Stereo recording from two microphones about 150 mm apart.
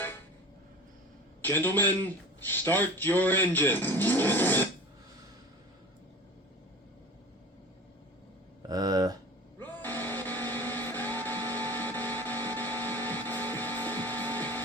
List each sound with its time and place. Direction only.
1.4 s a man's voice: 15° left (ahead or behind)
8.6 s a sound: 25° right (ahead or behind)
9.6 s vehicle: 15° left (ahead or behind)
12.5 s music: 10° left (ahead or behind)